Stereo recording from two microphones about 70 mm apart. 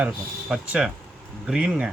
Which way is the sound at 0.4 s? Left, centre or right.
Centre.